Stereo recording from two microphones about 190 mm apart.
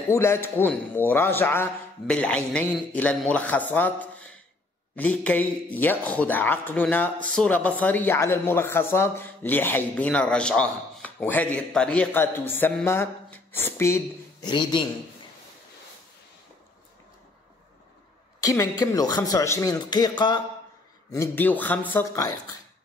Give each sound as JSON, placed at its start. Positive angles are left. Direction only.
{"t": 0.1, "sound": "a man's voice", "side_deg": 15}
{"t": 18.4, "sound": "a man's voice", "side_deg": 15}